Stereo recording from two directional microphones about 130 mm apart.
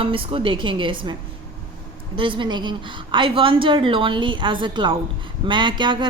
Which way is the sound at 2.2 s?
40° right (ahead or behind).